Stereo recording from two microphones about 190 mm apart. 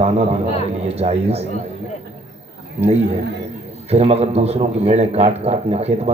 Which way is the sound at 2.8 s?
35° right (ahead or behind).